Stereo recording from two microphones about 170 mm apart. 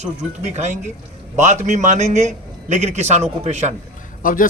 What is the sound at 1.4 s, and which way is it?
A man's voice, 45° right (ahead or behind).